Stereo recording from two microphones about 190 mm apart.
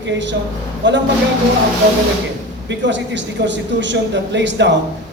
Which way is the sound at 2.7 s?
70° right (ahead or behind).